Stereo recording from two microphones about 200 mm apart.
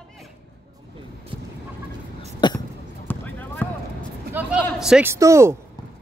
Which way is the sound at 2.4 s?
20° left (ahead or behind).